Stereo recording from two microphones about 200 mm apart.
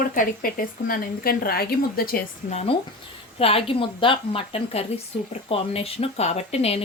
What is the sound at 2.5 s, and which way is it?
A woman's voice, 35° left (ahead or behind).